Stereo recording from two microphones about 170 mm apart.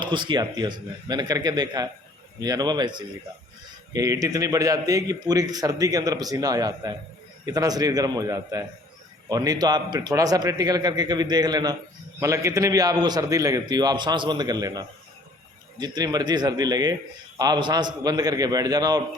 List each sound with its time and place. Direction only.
0.0 s a man's voice: 25° right (ahead or behind)
3.9 s a man's voice: 20° right (ahead or behind)